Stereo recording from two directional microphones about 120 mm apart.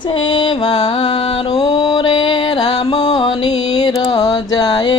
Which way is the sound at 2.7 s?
55° left (ahead or behind).